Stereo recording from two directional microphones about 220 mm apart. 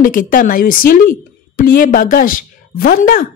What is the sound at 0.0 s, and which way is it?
Speech, 40° left (ahead or behind).